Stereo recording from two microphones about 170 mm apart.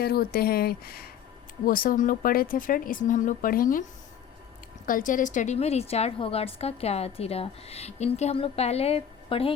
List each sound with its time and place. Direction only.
0.0 s a woman's voice: 65° left (ahead or behind)
4.9 s a woman's voice: 50° left (ahead or behind); by 9.6 s 35° left (ahead or behind)